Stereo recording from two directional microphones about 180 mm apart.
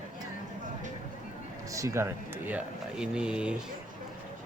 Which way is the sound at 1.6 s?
15° right (ahead or behind).